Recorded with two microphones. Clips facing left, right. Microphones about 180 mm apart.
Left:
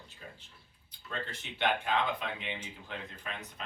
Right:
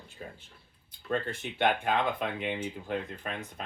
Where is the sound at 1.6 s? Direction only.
50° right (ahead or behind).